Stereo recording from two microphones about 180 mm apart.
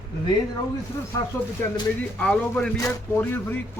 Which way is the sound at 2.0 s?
10° left (ahead or behind).